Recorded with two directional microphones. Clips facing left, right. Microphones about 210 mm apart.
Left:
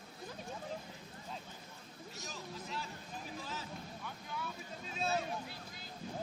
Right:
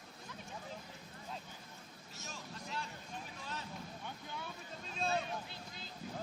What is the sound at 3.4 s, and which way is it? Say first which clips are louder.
Vehicle: left 1 dB; centre (ahead or behind).